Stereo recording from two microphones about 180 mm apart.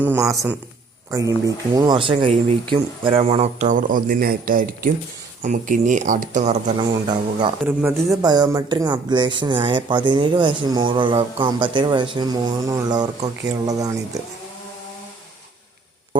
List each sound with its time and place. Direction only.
0.0 s speech: 15° right (ahead or behind); by 6.8 s 40° right (ahead or behind)
7.1 s speech: 25° right (ahead or behind)
7.6 s speech: 10° right (ahead or behind)